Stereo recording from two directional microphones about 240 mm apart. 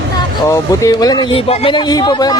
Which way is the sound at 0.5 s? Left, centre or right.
Centre.